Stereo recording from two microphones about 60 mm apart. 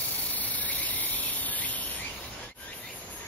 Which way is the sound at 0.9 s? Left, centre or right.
Left.